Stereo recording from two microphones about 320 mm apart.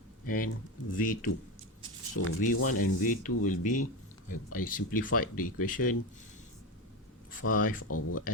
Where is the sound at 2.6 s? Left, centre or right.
Left.